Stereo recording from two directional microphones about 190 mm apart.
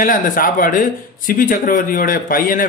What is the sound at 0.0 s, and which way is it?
A man's voice, 45° left (ahead or behind).